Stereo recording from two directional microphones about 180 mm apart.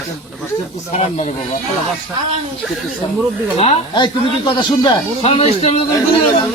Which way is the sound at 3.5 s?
35° left (ahead or behind).